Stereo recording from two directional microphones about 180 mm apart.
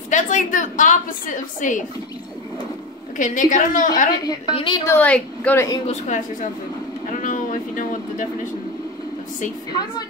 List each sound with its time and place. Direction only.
0.1 s a woman's voice: 45° left (ahead or behind)
3.2 s a woman's voice: 45° left (ahead or behind)
4.2 s a woman's voice: 25° left (ahead or behind)
4.8 s a woman's voice: 10° left (ahead or behind)
5.9 s a woman's voice: 40° left (ahead or behind)
7.1 s a sound: 45° left (ahead or behind)
9.7 s a woman's voice: 25° left (ahead or behind)